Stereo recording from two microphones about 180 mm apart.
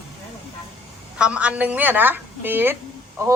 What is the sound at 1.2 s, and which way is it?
A woman's voice, 5° right (ahead or behind).